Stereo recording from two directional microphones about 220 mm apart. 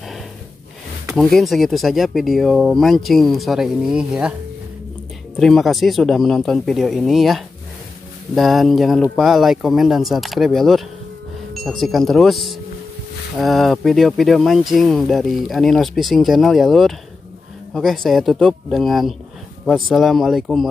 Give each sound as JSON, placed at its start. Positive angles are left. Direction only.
{"t": 1.0, "sound": "speech", "side_deg": 0}
{"t": 5.4, "sound": "speech", "side_deg": 0}